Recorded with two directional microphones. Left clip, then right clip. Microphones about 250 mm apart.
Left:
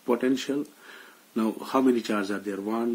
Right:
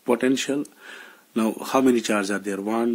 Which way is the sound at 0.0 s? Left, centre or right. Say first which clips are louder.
Right 4 dB; right.